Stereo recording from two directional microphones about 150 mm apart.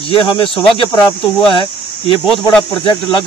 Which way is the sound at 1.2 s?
Centre (ahead or behind).